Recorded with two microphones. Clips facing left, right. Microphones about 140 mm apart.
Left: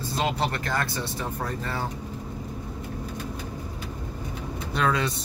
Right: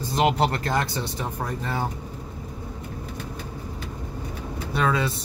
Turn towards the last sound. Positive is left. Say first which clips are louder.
# right 1 dB
turn(degrees=-5)  # may be behind; listen again after turning